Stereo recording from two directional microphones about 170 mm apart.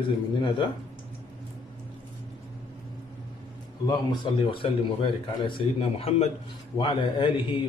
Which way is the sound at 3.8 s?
25° left (ahead or behind).